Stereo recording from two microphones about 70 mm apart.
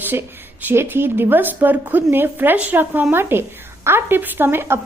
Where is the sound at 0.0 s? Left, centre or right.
Right.